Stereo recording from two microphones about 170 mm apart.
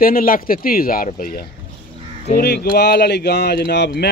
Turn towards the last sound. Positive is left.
turn(degrees=75)  # may be behind; listen again after turning